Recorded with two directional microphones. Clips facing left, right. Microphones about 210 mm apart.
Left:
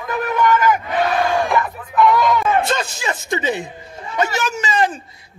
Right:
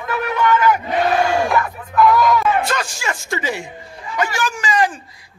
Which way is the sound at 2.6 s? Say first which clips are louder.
Left 1 dB; 25° left (ahead or behind).